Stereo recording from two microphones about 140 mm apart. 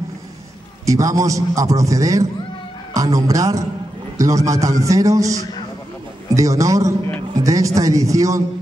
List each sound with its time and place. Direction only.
0.8 s a man's voice: 25° right (ahead or behind)